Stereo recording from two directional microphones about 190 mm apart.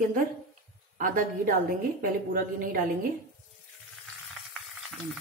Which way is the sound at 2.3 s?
45° right (ahead or behind).